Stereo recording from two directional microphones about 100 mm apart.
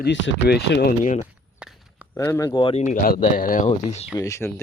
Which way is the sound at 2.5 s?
45° left (ahead or behind).